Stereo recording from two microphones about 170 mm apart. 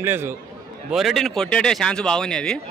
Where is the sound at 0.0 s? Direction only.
15° right (ahead or behind).